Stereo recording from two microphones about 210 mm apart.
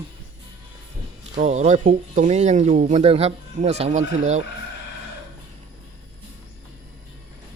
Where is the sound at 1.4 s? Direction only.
35° right (ahead or behind).